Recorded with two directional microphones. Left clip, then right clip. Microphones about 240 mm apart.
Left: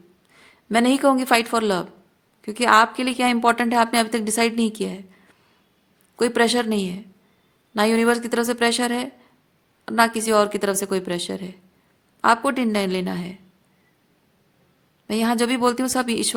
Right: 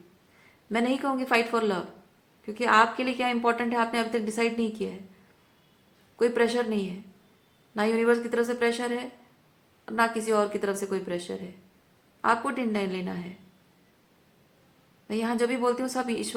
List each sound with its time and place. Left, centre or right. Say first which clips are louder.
0.3 s a woman's voice: left 8 dB; left
6.1 s a woman's voice: left 5 dB; left
15.0 s a woman's voice: left 6 dB; left